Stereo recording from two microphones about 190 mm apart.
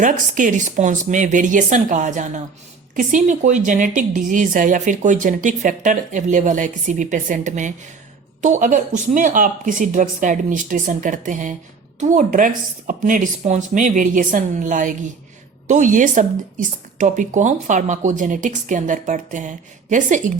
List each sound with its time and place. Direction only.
0.0 s a woman's voice: 40° right (ahead or behind)